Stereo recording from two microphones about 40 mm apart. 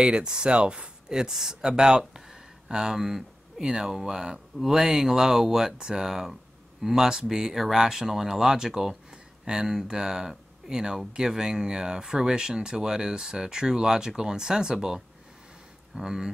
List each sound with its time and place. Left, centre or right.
0.0 s speech: right